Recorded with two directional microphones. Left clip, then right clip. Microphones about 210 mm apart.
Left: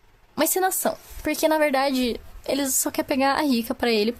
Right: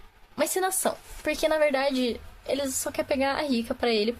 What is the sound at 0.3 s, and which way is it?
Speech, 40° left (ahead or behind).